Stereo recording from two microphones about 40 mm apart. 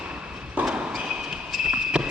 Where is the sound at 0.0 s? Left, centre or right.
Right.